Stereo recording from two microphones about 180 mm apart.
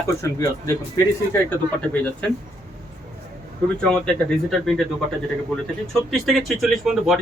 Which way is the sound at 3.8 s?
5° left (ahead or behind).